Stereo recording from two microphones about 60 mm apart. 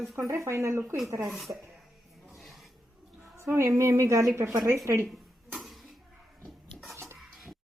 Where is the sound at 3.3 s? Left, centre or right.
Right.